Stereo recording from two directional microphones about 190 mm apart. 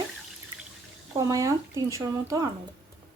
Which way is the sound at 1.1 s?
15° right (ahead or behind).